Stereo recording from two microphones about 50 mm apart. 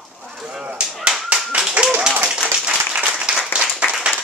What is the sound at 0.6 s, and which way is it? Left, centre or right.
Speech, right.